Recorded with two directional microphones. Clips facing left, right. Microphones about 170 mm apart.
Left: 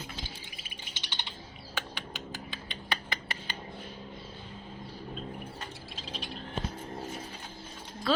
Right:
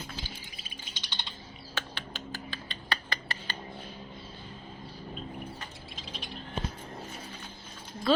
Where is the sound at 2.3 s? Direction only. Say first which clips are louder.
Right 1 dB; 20° left (ahead or behind).